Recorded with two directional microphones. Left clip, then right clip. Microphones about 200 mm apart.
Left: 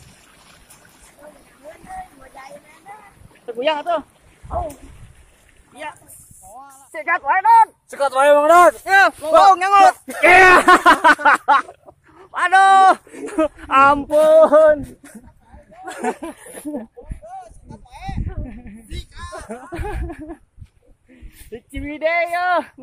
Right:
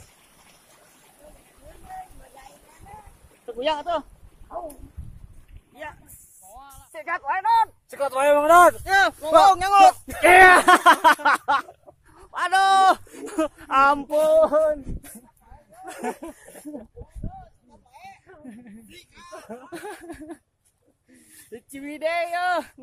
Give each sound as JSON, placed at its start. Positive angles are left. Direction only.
{"t": 3.4, "sound": "speech", "side_deg": -10}
{"t": 5.7, "sound": "speech", "side_deg": -5}
{"t": 7.9, "sound": "speech", "side_deg": -20}
{"t": 8.8, "sound": "speech", "side_deg": -10}
{"t": 14.3, "sound": "a sound", "side_deg": 10}
{"t": 16.2, "sound": "speech", "side_deg": -15}
{"t": 17.6, "sound": "a sound", "side_deg": 10}
{"t": 21.5, "sound": "speech", "side_deg": -5}